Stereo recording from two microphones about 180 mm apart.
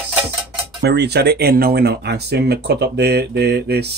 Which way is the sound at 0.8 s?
65° right (ahead or behind).